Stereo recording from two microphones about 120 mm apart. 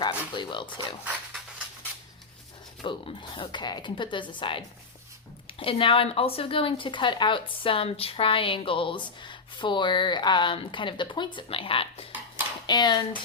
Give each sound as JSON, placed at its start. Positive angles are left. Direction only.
{"t": 0.3, "sound": "speech", "side_deg": 40}
{"t": 2.8, "sound": "speech", "side_deg": 45}
{"t": 12.6, "sound": "speech", "side_deg": 35}